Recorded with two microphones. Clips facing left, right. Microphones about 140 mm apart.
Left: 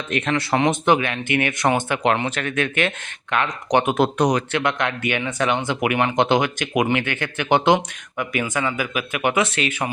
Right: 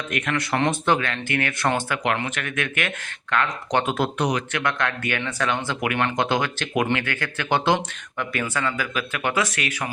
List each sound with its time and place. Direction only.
0.1 s speech: 30° left (ahead or behind)
0.5 s speech: 15° left (ahead or behind)
2.0 s speech: 30° left (ahead or behind)
4.2 s speech: 40° left (ahead or behind)
4.5 s speech: 20° left (ahead or behind)